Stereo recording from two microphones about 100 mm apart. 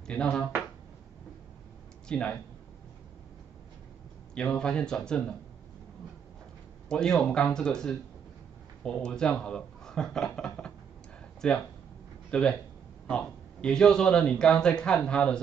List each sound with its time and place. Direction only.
0.0 s speech: 10° left (ahead or behind)
2.0 s speech: 10° left (ahead or behind)
4.4 s a man's voice: 10° left (ahead or behind)
6.9 s a man's voice: 5° left (ahead or behind)